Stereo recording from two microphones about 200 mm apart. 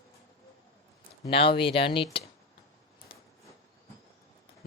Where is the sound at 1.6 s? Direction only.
25° left (ahead or behind).